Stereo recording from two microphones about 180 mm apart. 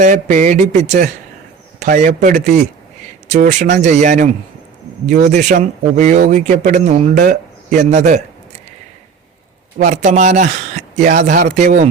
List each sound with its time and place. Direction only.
0.0 s speech: 40° right (ahead or behind)
9.7 s speech: 40° right (ahead or behind)